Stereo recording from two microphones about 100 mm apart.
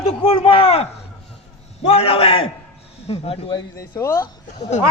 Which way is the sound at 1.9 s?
70° left (ahead or behind).